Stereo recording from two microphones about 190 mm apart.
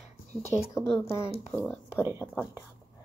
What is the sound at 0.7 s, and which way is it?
Speech, 15° left (ahead or behind).